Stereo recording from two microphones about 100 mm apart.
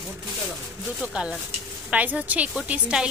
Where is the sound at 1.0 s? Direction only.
10° right (ahead or behind).